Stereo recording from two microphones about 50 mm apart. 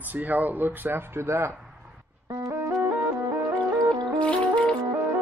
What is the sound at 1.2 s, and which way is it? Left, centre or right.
Speech, right.